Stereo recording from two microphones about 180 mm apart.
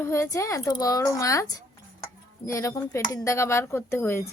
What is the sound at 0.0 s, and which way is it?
Speech, 15° left (ahead or behind).